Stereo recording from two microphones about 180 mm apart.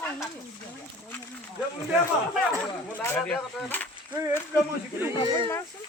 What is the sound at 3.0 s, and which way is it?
Speech, 10° left (ahead or behind).